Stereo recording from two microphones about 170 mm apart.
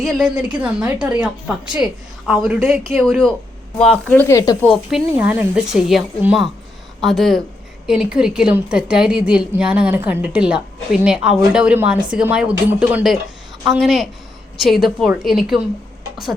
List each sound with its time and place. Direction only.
0.0 s a woman's voice: centre (ahead or behind); by 4.5 s 20° left (ahead or behind)
4.6 s a woman's voice: centre (ahead or behind)